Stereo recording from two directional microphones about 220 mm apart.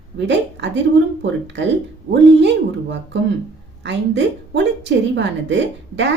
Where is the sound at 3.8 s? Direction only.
55° right (ahead or behind).